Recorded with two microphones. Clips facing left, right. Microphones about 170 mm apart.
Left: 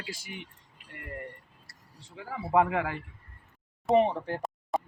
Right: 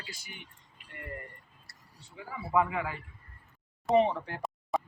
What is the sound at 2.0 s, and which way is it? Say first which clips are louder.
Speech: left 4 dB; 70° left (ahead or behind).